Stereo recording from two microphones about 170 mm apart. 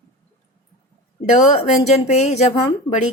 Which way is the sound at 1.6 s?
40° left (ahead or behind).